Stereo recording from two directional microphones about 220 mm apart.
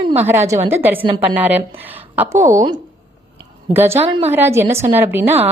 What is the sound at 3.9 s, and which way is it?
Speech, 25° right (ahead or behind).